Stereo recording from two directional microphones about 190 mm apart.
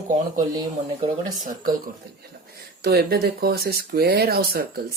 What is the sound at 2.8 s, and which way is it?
Speech, 55° right (ahead or behind).